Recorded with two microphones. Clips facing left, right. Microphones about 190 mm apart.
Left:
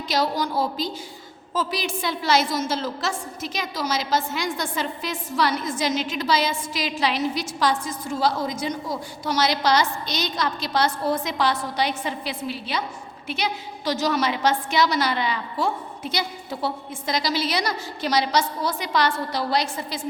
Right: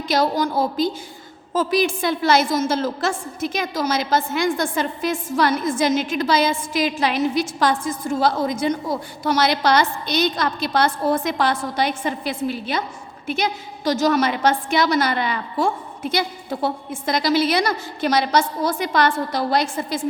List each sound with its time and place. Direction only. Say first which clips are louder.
0.1 s a woman's voice: right 4 dB; 50° right (ahead or behind)